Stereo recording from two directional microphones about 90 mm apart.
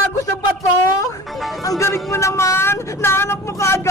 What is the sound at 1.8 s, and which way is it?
Speech, 30° left (ahead or behind).